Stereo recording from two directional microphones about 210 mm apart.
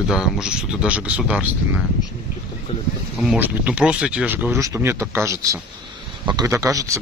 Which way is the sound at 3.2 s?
5° right (ahead or behind).